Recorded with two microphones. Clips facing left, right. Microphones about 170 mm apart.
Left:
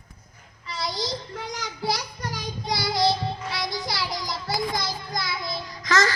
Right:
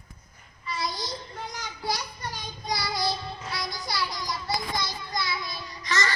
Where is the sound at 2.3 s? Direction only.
90° left.